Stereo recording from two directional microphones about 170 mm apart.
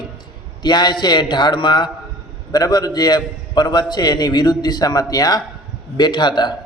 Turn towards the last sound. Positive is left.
turn(degrees=25)  # may be behind; listen again after turning